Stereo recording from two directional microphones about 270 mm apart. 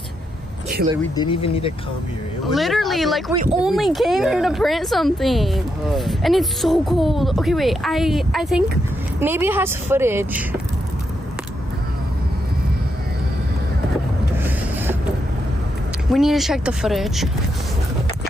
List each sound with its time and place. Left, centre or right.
1.1 s speech: centre
2.4 s a woman's voice: centre
16.1 s a woman's voice: centre